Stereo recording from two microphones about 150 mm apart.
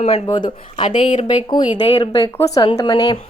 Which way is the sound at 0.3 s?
30° left (ahead or behind).